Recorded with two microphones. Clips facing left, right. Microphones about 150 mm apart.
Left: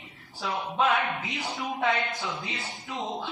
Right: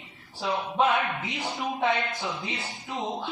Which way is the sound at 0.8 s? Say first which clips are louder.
Right 1 dB; 20° right (ahead or behind).